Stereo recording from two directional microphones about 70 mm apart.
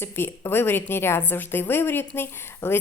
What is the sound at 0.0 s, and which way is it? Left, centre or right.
A woman's voice, left.